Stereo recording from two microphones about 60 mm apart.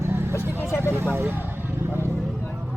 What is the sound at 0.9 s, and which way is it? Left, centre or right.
Speech, right.